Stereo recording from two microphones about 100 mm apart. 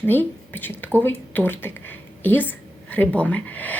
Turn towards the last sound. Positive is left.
turn(degrees=15)  # may be behind; listen again after turning